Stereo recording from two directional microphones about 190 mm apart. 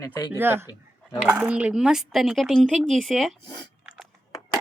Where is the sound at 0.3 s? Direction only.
10° right (ahead or behind).